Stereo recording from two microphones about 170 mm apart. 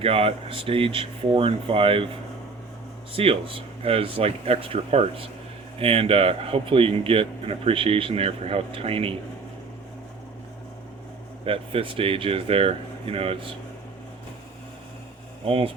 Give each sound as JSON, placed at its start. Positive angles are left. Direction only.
{"t": 0.0, "sound": "speech", "side_deg": -35}
{"t": 3.1, "sound": "speech", "side_deg": -30}
{"t": 11.4, "sound": "speech", "side_deg": -30}
{"t": 15.4, "sound": "speech", "side_deg": -35}